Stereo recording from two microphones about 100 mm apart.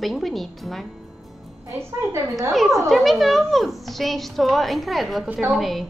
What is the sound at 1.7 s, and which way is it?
Speech, 30° right (ahead or behind).